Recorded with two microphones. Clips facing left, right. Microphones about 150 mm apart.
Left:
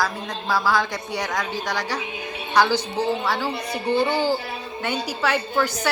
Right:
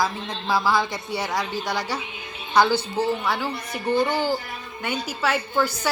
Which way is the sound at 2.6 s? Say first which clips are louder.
Even; 15° left (ahead or behind).